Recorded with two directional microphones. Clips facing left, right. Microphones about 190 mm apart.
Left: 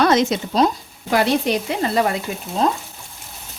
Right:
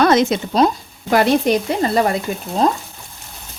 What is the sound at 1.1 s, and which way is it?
Stir, 50° right (ahead or behind).